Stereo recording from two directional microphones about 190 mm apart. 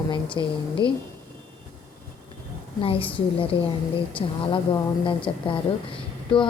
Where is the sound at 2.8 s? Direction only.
30° left (ahead or behind).